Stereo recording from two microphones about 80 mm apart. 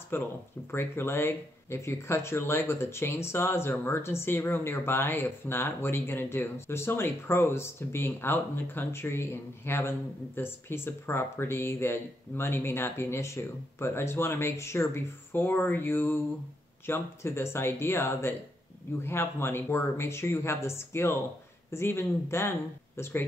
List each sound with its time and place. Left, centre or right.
0.1 s speech: left